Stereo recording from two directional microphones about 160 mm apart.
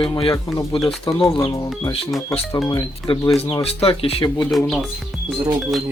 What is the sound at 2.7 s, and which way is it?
Speech, 30° left (ahead or behind).